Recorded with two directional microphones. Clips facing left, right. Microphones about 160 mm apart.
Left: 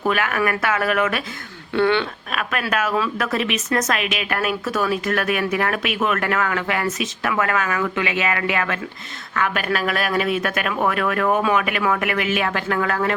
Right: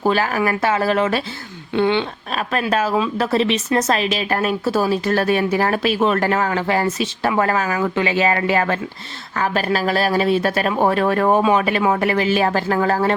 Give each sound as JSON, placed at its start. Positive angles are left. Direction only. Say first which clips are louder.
{"t": 0.0, "sound": "speech", "louder": "right 3 dB", "side_deg": -30}
{"t": 1.7, "sound": "speech", "louder": "right 1 dB", "side_deg": -20}
{"t": 2.3, "sound": "speech", "louder": "right 4 dB", "side_deg": -30}